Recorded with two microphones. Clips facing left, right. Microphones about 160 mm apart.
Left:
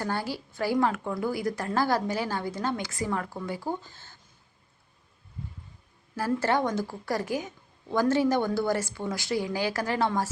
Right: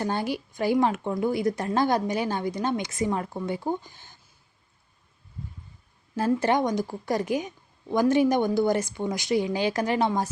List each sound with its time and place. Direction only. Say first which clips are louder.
0.0 s a woman's voice: right 3 dB; 20° right (ahead or behind)
6.1 s a woman's voice: right 3 dB; 20° right (ahead or behind)